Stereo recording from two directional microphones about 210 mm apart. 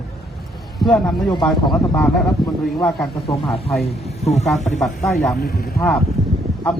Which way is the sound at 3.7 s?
Centre (ahead or behind).